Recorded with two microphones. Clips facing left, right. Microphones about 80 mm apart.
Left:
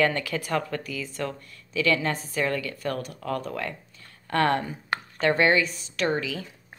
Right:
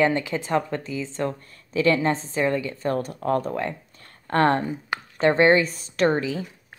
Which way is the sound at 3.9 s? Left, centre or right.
Right.